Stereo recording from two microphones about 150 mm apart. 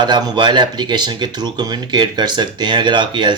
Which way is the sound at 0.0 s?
30° right (ahead or behind).